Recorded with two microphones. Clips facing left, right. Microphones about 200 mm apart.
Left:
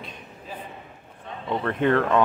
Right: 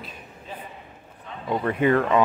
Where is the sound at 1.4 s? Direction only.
5° right (ahead or behind).